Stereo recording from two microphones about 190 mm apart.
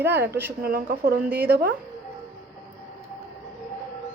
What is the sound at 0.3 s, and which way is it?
Speech, 10° right (ahead or behind).